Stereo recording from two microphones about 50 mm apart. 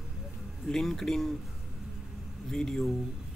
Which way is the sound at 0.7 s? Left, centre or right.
Centre.